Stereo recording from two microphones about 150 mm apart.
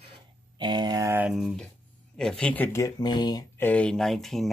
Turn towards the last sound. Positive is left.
turn(degrees=0)  # may be behind; listen again after turning